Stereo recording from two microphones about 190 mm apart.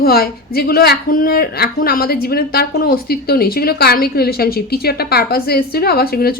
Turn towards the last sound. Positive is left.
turn(degrees=55)  # may be behind; listen again after turning